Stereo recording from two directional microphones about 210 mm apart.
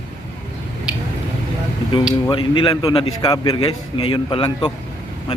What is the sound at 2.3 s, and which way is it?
Speech, 25° left (ahead or behind).